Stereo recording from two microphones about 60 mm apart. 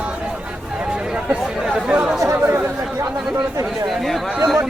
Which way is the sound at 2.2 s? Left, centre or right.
Right.